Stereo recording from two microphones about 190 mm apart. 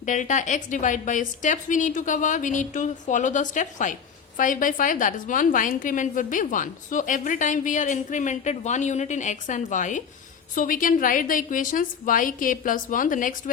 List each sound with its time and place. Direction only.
0.0 s a woman's voice: 40° left (ahead or behind)